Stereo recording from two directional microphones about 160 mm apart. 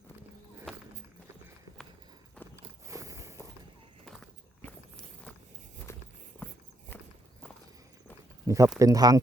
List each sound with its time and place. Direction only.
2.8 s walk: 20° right (ahead or behind)
4.6 s walk: 5° left (ahead or behind)
5.9 s a sound: 15° left (ahead or behind)
8.4 s speech: 20° right (ahead or behind)